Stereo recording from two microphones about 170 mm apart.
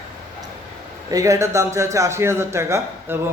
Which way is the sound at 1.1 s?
20° right (ahead or behind).